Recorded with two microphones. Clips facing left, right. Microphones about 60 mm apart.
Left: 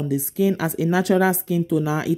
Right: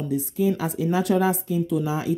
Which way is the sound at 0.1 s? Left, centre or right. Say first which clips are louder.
Left 2 dB; left.